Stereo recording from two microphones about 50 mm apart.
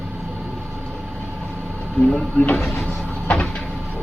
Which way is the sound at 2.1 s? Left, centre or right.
Left.